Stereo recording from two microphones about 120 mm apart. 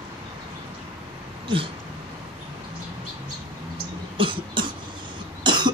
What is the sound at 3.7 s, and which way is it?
Cough, 45° right (ahead or behind).